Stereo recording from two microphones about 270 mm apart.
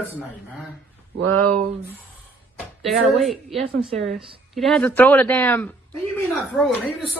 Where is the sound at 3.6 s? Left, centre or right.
Right.